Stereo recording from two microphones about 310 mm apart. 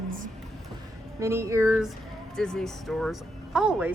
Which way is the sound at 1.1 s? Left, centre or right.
Centre.